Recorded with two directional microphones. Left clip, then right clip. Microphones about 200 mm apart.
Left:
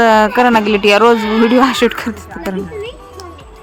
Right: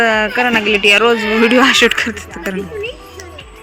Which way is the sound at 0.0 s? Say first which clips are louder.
Left 4 dB; 30° left (ahead or behind).